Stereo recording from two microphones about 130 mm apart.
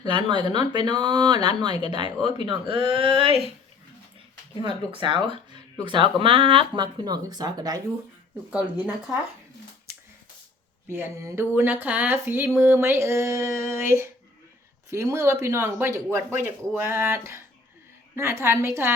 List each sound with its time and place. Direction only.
0.0 s speech: 35° right (ahead or behind)
4.6 s speech: 40° right (ahead or behind)
8.4 s speech: 10° right (ahead or behind)
10.8 s speech: 20° right (ahead or behind)